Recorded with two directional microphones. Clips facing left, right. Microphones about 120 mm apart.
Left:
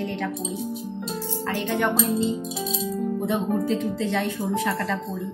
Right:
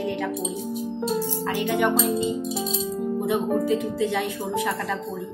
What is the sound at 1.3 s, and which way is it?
Speech, 15° right (ahead or behind).